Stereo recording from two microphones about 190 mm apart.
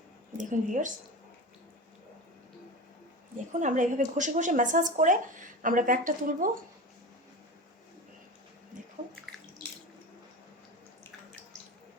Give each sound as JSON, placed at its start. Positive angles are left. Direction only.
{"t": 0.3, "sound": "a woman's voice", "side_deg": -40}
{"t": 3.5, "sound": "a woman's voice", "side_deg": -40}